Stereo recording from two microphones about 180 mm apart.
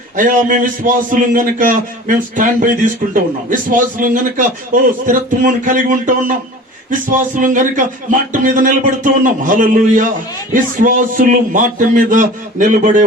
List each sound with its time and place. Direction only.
0.2 s a man's voice: 45° right (ahead or behind)